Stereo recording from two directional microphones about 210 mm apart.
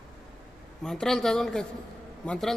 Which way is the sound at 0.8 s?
Centre (ahead or behind).